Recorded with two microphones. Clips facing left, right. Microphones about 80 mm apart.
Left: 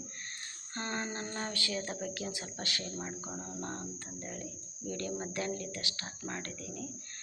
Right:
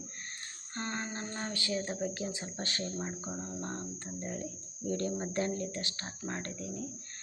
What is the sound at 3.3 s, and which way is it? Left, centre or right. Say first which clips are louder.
Speech: right 2 dB; centre.